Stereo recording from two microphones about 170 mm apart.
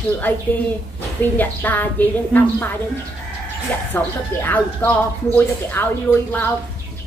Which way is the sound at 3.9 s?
10° left (ahead or behind).